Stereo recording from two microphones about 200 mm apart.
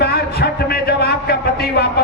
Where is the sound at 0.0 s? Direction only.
55° left (ahead or behind).